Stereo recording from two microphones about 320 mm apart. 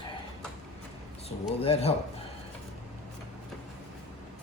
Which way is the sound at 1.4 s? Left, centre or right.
Centre.